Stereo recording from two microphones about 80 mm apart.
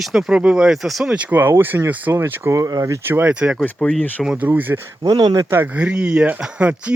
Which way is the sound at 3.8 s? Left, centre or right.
Centre.